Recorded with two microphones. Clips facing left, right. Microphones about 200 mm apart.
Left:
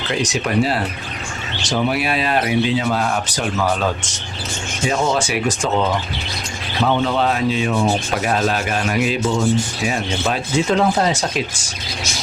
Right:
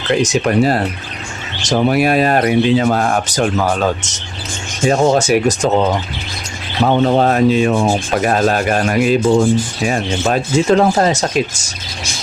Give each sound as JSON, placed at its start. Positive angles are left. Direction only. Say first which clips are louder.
{"t": 0.2, "sound": "speech", "louder": "right 3 dB", "side_deg": -50}
{"t": 6.8, "sound": "speech", "louder": "right 5 dB", "side_deg": -45}